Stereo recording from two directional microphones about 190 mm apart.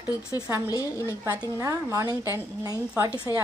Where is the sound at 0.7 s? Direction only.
15° left (ahead or behind).